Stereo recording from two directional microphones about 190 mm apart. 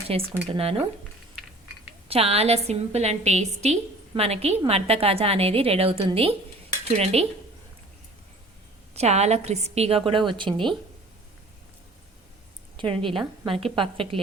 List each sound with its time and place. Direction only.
0.1 s a woman's voice: 30° right (ahead or behind)
2.0 s a woman's voice: 30° right (ahead or behind)
9.0 s a woman's voice: 35° right (ahead or behind)
12.7 s a woman's voice: 25° right (ahead or behind)